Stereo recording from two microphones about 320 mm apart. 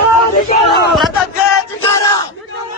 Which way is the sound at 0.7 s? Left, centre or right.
Left.